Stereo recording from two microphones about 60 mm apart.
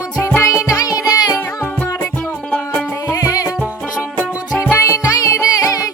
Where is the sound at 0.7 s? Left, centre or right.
Left.